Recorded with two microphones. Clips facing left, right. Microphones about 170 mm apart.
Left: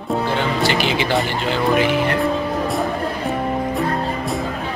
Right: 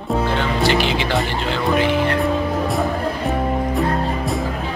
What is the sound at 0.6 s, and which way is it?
Music, centre (ahead or behind).